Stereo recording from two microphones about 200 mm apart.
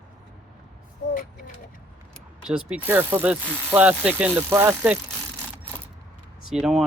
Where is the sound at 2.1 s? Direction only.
5° right (ahead or behind).